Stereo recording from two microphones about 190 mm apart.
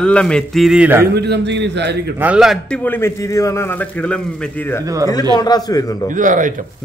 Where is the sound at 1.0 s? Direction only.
60° right (ahead or behind).